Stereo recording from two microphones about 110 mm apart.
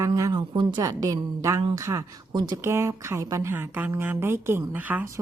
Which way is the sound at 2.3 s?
40° right (ahead or behind).